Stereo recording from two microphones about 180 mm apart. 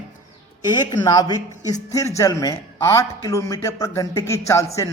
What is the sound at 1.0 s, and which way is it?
A man's voice, 20° left (ahead or behind).